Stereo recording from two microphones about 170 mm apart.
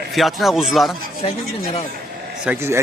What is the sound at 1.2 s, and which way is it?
Speech, 35° left (ahead or behind).